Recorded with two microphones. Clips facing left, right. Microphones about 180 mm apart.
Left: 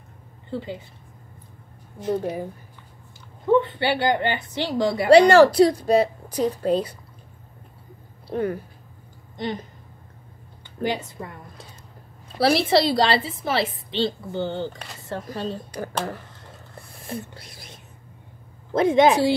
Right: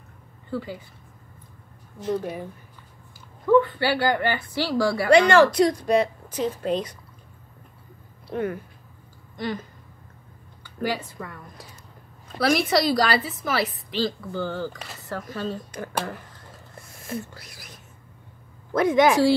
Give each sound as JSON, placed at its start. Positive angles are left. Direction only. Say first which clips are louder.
{"t": 0.5, "sound": "a woman's voice", "louder": "even", "side_deg": 25}
{"t": 2.0, "sound": "a woman's voice", "louder": "left 2 dB", "side_deg": 25}
{"t": 3.4, "sound": "a woman's voice", "louder": "right 1 dB", "side_deg": 25}
{"t": 5.1, "sound": "speech", "louder": "left 4 dB", "side_deg": 35}
{"t": 8.3, "sound": "speech", "louder": "left 2 dB", "side_deg": 35}
{"t": 9.4, "sound": "a woman's voice", "louder": "left 1 dB", "side_deg": 25}
{"t": 15.0, "sound": "a sound", "louder": "left 2 dB", "side_deg": 25}
{"t": 15.2, "sound": "speech", "louder": "even", "side_deg": 35}
{"t": 16.7, "sound": "a sound", "louder": "right 1 dB", "side_deg": 30}
{"t": 17.2, "sound": "a woman's voice", "louder": "even", "side_deg": 25}